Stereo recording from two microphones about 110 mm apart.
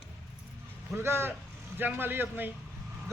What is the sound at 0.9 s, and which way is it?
Speech, 20° right (ahead or behind).